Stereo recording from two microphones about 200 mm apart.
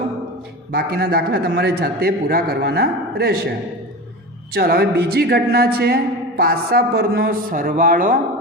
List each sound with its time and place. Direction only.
0.7 s a woman's voice: 50° right (ahead or behind)
4.5 s a woman's voice: 50° right (ahead or behind)